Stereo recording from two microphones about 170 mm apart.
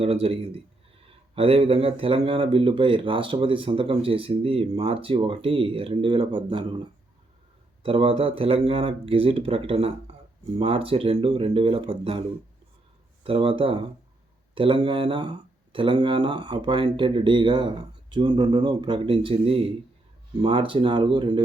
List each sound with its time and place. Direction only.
0.0 s speech: 35° right (ahead or behind)
13.2 s speech: 30° right (ahead or behind)